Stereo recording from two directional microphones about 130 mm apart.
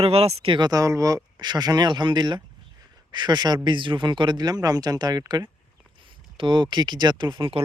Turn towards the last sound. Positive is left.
turn(degrees=-40)  # may be behind; listen again after turning